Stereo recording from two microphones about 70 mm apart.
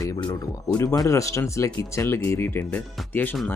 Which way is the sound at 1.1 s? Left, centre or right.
Left.